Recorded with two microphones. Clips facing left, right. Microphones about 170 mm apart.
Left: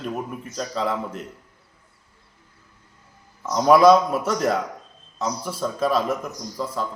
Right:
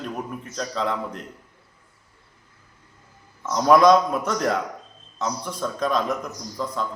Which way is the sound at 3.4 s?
5° left (ahead or behind).